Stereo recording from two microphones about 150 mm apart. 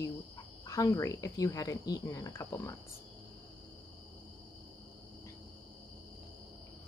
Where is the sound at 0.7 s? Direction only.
20° left (ahead or behind).